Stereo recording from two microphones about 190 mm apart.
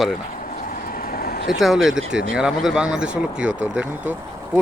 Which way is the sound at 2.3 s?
Centre (ahead or behind).